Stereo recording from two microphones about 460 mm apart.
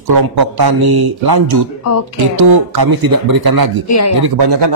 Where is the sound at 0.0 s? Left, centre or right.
Right.